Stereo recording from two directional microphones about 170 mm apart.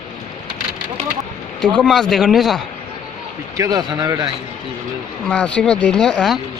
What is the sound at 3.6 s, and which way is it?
Speech, 25° right (ahead or behind).